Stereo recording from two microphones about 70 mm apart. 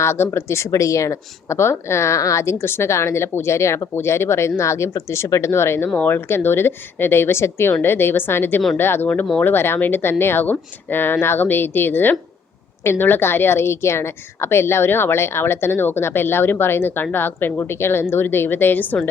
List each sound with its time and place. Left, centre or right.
0.0 s a woman's voice: left